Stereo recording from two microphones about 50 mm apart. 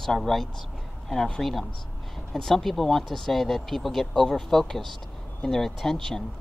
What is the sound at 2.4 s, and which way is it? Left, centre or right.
Speech, centre.